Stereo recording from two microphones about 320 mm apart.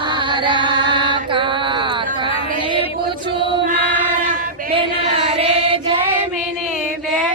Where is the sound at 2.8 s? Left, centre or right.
Centre.